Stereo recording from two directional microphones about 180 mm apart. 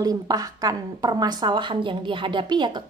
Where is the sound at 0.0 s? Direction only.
20° right (ahead or behind).